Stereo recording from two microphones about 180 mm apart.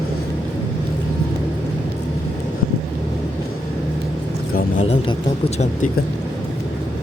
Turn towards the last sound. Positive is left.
turn(degrees=35)  # may be behind; listen again after turning